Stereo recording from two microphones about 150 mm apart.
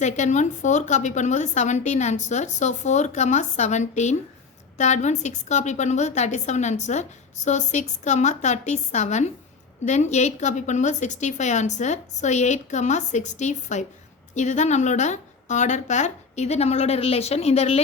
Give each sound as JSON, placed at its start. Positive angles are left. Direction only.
{"t": 0.0, "sound": "a woman's voice", "side_deg": 50}